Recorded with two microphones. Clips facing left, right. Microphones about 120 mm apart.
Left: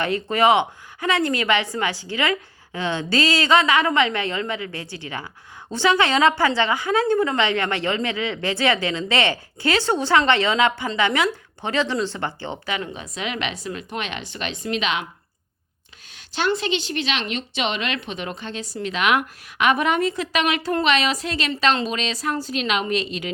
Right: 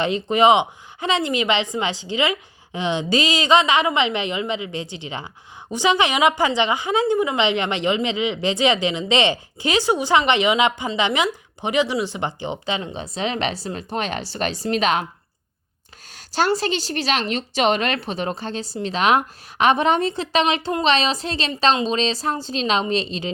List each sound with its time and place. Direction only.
0.0 s a woman's voice: 20° right (ahead or behind); by 15.0 s 40° right (ahead or behind)
16.1 s a woman's voice: 40° right (ahead or behind)